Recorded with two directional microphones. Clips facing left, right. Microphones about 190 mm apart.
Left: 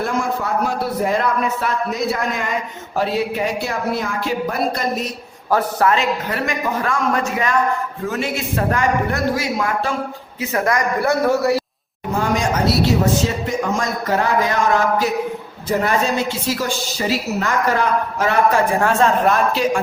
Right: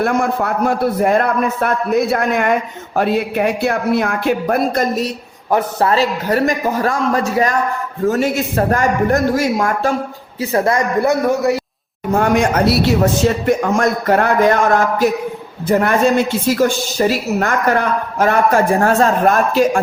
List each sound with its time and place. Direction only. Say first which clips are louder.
0.0 s a man's voice: right 5 dB; 60° right (ahead or behind)
5.5 s a man's voice: right 1 dB; 20° right (ahead or behind)
5.9 s a man's voice: right 4 dB; 35° right (ahead or behind)
10.5 s a man's voice: right 4 dB; 30° right (ahead or behind)
12.1 s a man's voice: right 5 dB; 60° right (ahead or behind)